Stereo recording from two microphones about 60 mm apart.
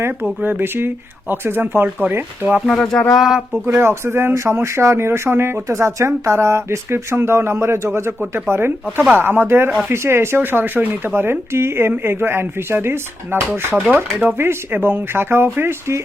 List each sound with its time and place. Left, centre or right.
0.4 s speech: right
2.7 s music: centre
3.1 s speech: centre
3.8 s speech: right
5.6 s speech: right